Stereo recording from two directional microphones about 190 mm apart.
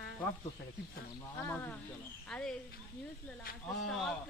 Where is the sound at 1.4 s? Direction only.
10° left (ahead or behind).